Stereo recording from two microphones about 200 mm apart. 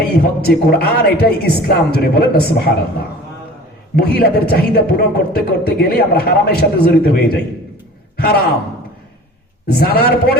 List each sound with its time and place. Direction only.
0.2 s a man's voice: 50° left (ahead or behind)
3.9 s a man's voice: 50° left (ahead or behind)
9.6 s a man's voice: 50° left (ahead or behind)